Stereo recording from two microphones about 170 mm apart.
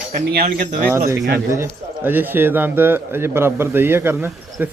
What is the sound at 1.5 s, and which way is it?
Speech, 15° right (ahead or behind).